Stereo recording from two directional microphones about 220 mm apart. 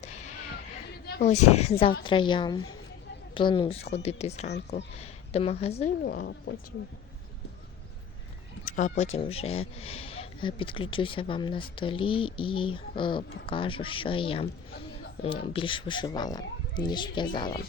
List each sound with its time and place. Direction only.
0.0 s music: 30° left (ahead or behind)
1.0 s a sound: 45° left (ahead or behind)
1.5 s speech: 30° left (ahead or behind)
6.0 s speech: 45° left (ahead or behind)
8.6 s speech: 35° left (ahead or behind)